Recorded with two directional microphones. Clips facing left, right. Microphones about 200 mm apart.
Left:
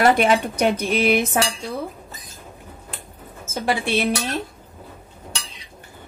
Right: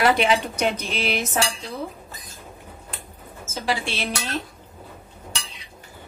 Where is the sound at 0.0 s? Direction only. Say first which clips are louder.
Left 3 dB; 45° left (ahead or behind).